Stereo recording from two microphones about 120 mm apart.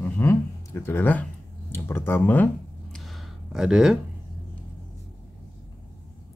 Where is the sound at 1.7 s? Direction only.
20° left (ahead or behind).